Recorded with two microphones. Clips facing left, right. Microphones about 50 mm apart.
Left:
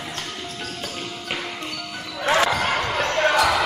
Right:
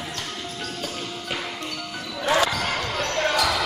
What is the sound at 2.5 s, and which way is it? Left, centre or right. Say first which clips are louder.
Basketball bounce: left 4 dB; left.